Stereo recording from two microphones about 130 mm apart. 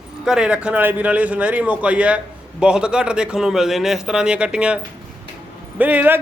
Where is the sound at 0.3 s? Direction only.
5° right (ahead or behind).